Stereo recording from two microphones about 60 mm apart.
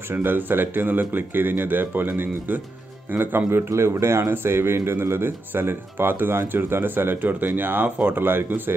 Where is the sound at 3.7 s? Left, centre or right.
Right.